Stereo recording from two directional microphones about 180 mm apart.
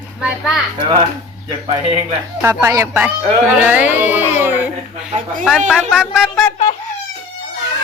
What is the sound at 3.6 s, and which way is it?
Music, 10° right (ahead or behind).